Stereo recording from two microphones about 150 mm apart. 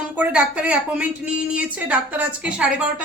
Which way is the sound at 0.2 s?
10° right (ahead or behind).